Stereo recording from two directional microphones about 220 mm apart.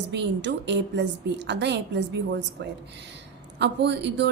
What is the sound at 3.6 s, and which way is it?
Speech, 50° right (ahead or behind).